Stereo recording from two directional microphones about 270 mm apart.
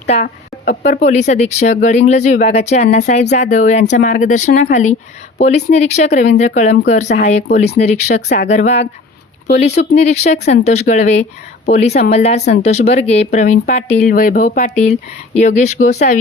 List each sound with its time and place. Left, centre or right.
0.1 s speech: left